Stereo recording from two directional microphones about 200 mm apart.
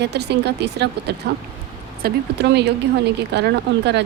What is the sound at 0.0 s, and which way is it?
Speech, 60° right (ahead or behind).